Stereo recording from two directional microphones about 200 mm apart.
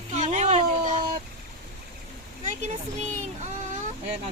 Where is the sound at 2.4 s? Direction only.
35° right (ahead or behind).